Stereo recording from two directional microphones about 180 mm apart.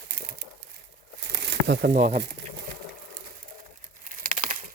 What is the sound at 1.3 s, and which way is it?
Crumpling, 65° right (ahead or behind).